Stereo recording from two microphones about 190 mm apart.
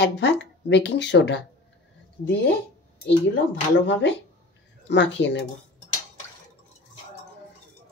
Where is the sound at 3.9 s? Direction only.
70° left (ahead or behind).